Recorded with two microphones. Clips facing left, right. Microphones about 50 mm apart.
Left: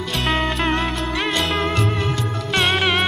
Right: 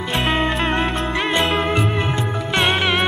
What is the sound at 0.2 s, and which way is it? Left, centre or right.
Music, centre.